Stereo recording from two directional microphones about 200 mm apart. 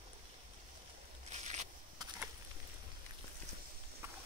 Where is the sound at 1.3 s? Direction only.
35° right (ahead or behind).